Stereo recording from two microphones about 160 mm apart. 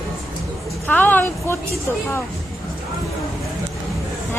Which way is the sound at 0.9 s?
10° left (ahead or behind).